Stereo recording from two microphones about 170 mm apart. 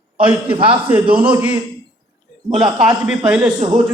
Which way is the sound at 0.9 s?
10° right (ahead or behind).